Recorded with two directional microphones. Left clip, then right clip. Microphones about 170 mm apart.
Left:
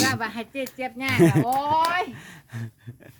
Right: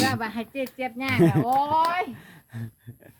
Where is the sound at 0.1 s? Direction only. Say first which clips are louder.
Left 1 dB; 25° left (ahead or behind).